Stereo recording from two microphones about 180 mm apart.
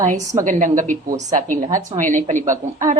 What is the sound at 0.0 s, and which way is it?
A woman's voice, 45° right (ahead or behind).